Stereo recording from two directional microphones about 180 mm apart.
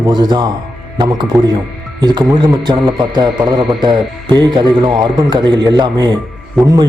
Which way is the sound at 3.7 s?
25° right (ahead or behind).